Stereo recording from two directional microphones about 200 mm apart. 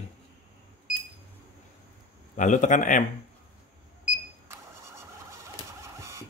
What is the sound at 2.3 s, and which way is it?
Speech, 40° left (ahead or behind).